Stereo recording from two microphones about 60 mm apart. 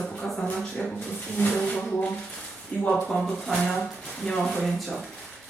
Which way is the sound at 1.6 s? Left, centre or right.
Centre.